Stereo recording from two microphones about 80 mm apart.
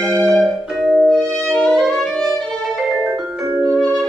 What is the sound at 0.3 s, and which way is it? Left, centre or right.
Music, centre.